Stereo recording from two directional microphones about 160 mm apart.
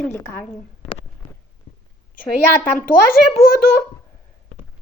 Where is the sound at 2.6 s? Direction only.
60° left (ahead or behind).